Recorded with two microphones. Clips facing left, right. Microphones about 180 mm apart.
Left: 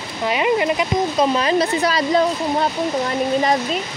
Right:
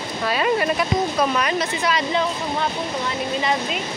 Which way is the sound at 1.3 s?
30° left (ahead or behind).